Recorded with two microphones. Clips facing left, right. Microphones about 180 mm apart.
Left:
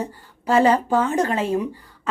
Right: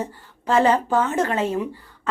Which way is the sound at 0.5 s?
35° left (ahead or behind).